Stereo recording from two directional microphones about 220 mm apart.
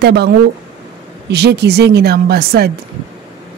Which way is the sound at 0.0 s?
50° right (ahead or behind).